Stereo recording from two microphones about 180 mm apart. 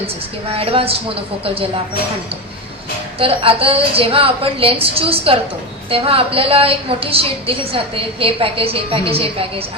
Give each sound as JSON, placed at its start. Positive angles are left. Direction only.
{"t": 0.5, "sound": "a woman's voice", "side_deg": -30}
{"t": 3.2, "sound": "a woman's voice", "side_deg": -30}